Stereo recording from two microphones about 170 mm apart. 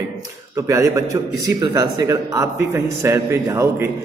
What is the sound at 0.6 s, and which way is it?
A man's voice, 20° right (ahead or behind).